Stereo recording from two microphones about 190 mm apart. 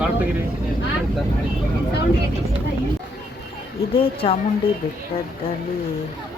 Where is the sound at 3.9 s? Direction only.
30° left (ahead or behind).